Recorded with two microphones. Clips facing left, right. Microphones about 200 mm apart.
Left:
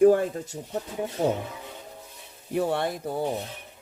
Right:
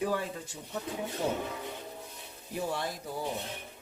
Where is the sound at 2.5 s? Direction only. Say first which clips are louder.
Left 8 dB; 60° left (ahead or behind).